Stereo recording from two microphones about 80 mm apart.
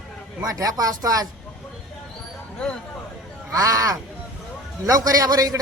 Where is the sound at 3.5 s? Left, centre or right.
Right.